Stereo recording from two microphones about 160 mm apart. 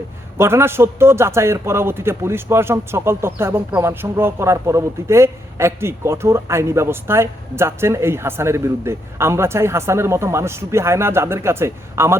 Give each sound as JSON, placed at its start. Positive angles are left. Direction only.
{"t": 0.3, "sound": "a man's voice", "side_deg": -15}